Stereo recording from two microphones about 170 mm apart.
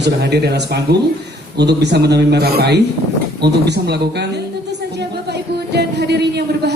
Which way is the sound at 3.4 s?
80° right.